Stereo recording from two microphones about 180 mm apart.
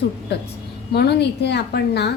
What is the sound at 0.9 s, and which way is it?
A woman's voice, 70° left (ahead or behind).